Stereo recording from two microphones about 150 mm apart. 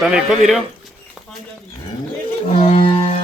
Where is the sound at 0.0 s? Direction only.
Centre (ahead or behind).